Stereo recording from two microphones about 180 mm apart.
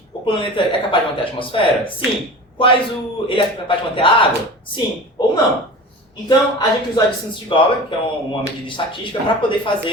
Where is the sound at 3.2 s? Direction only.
30° left (ahead or behind).